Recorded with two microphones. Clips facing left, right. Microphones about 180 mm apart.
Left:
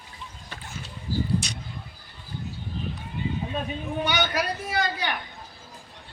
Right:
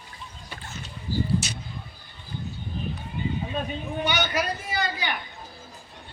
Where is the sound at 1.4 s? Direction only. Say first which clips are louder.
Right 1 dB; 5° right (ahead or behind).